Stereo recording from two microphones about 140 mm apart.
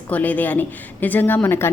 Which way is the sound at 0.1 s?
10° left (ahead or behind).